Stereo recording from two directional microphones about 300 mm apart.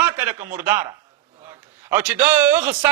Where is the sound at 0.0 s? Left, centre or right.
Centre.